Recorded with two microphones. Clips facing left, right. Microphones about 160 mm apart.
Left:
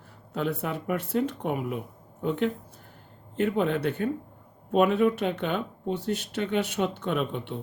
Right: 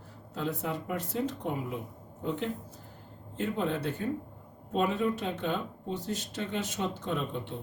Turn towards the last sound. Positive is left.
turn(degrees=70)  # may be behind; listen again after turning